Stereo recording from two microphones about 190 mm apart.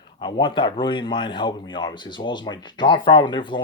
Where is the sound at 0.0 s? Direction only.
25° left (ahead or behind).